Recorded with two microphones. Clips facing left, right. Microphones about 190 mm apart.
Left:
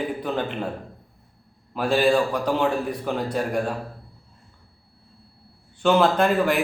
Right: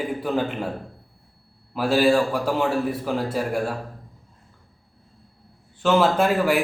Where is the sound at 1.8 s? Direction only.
5° right (ahead or behind).